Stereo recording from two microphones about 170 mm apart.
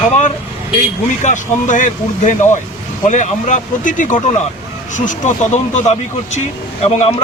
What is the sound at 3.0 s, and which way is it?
A man's voice, 45° left (ahead or behind).